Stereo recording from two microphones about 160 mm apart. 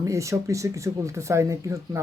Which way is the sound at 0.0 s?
20° right (ahead or behind).